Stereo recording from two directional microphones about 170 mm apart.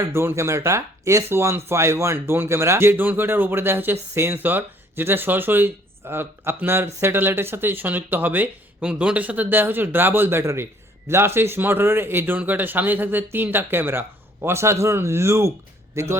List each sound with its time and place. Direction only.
0.1 s speech: 15° right (ahead or behind)